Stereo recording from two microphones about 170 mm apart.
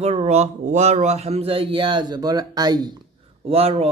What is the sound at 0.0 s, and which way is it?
Speech, 40° right (ahead or behind).